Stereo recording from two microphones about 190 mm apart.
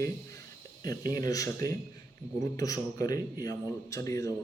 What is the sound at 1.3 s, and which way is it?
A man's voice, 15° left (ahead or behind).